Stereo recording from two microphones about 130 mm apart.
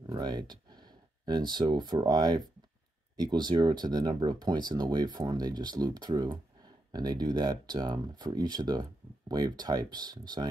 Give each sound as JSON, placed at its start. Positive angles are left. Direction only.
{"t": 0.0, "sound": "speech", "side_deg": -30}